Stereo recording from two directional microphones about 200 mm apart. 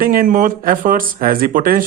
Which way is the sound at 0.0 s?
45° right (ahead or behind).